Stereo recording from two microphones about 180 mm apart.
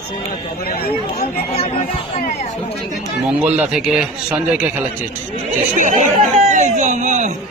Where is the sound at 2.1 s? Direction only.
50° left (ahead or behind).